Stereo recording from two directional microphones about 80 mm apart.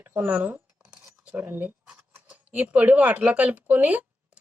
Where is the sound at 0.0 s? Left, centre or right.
Right.